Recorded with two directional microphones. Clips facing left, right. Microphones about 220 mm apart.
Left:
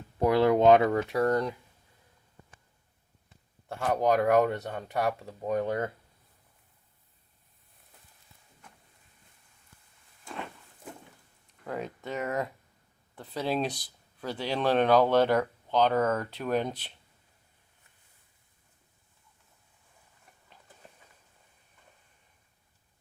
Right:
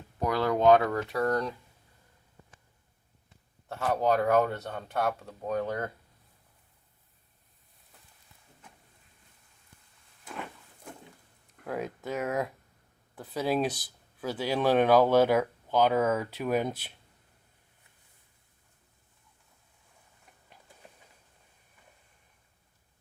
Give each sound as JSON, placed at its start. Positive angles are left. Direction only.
{"t": 0.2, "sound": "speech", "side_deg": 25}
{"t": 4.0, "sound": "speech", "side_deg": 15}
{"t": 4.7, "sound": "speech", "side_deg": 0}
{"t": 5.5, "sound": "speech", "side_deg": 20}
{"t": 11.6, "sound": "speech", "side_deg": -5}
{"t": 20.5, "sound": "a sound", "side_deg": -10}